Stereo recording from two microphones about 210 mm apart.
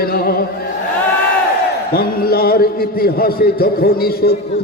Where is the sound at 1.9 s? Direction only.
45° left (ahead or behind).